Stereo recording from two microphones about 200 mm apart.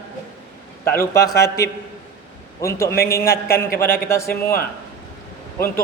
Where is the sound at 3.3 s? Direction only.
50° left (ahead or behind).